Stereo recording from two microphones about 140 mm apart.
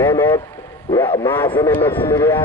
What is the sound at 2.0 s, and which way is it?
Cattle, 40° left (ahead or behind).